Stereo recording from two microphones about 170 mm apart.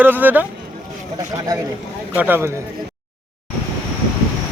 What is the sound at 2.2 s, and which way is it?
Speech, 15° right (ahead or behind).